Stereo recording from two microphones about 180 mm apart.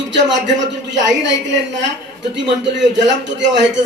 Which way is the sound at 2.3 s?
80° right.